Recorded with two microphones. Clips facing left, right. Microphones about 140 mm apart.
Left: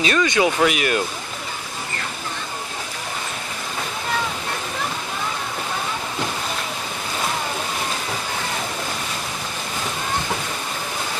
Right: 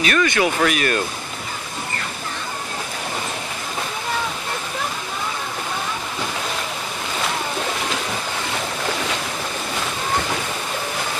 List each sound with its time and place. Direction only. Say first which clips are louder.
0.0 s speech: even; 20° left (ahead or behind)